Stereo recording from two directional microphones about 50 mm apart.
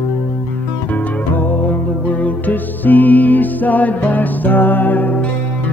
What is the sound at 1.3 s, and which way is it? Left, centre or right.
Music, left.